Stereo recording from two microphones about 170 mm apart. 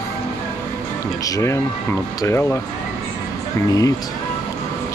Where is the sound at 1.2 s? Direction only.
20° left (ahead or behind).